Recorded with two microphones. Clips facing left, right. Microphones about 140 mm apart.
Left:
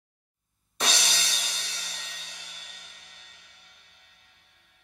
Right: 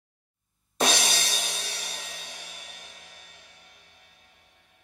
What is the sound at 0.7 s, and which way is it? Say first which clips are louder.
Music: right 6 dB; 50° right (ahead or behind).